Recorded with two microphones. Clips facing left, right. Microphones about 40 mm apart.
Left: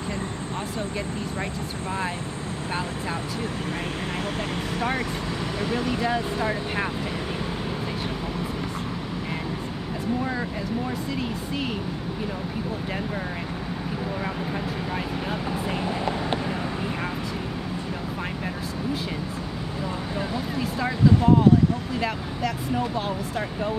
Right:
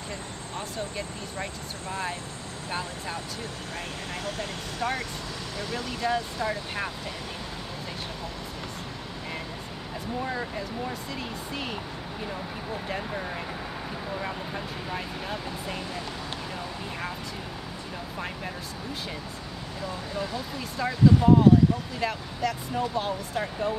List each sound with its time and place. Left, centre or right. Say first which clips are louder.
4.4 s speech: left 4 dB; centre
11.1 s speech: left 5 dB; centre
14.9 s speech: left 4 dB; centre
15.8 s speech: left 8 dB; left
20.2 s speech: left 4 dB; centre